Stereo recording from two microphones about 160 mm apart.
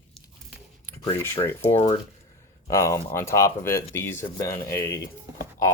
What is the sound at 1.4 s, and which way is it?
Speech, 15° left (ahead or behind).